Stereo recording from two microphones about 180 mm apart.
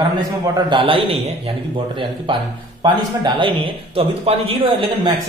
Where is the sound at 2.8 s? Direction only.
25° right (ahead or behind).